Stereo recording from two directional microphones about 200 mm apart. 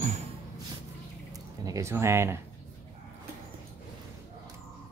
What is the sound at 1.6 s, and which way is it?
Speech, 15° right (ahead or behind).